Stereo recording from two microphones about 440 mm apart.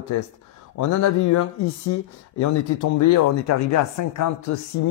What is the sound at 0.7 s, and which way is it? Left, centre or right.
Speech, left.